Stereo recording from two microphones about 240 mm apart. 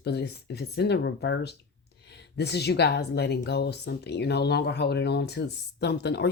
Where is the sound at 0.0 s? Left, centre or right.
Left.